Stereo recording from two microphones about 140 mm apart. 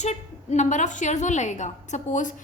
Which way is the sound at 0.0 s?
55° left (ahead or behind).